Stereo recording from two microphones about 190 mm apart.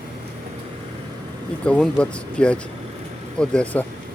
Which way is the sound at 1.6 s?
5° left (ahead or behind).